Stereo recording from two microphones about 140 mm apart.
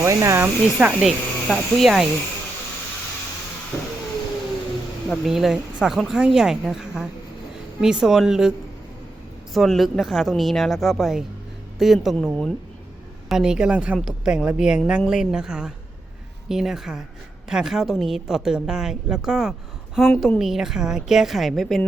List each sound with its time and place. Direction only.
0.0 s a woman's voice: 20° right (ahead or behind); by 2.0 s centre (ahead or behind)
5.0 s speech: 10° left (ahead or behind)
5.3 s a woman's voice: 5° right (ahead or behind)